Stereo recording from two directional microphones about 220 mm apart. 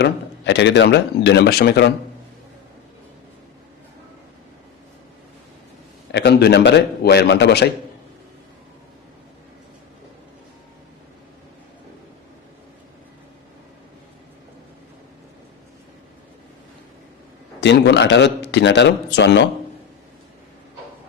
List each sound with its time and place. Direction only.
0.0 s speech: 55° left (ahead or behind)
6.1 s speech: 50° left (ahead or behind)
17.6 s speech: 50° left (ahead or behind)